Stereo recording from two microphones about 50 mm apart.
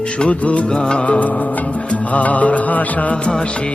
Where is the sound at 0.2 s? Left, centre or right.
Left.